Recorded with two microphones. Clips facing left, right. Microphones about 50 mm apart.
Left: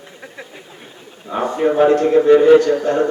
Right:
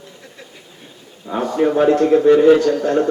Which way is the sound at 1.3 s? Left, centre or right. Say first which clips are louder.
Even; centre.